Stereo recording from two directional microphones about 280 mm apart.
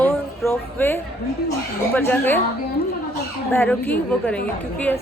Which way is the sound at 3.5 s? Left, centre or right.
Centre.